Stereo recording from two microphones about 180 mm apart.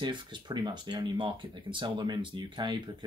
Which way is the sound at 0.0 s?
25° right (ahead or behind).